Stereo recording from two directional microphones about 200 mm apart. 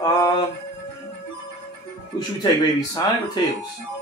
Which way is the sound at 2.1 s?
20° left (ahead or behind).